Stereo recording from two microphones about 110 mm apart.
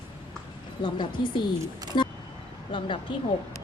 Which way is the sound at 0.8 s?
45° left (ahead or behind).